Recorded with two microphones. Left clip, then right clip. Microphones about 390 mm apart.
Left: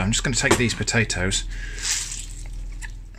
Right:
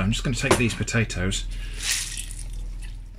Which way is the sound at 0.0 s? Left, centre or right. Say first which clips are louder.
Left 4 dB; centre.